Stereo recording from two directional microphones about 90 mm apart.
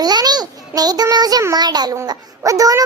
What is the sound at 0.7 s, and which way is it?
A child's voice, 45° right (ahead or behind).